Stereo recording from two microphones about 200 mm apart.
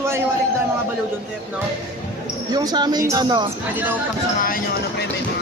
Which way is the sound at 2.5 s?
20° right (ahead or behind).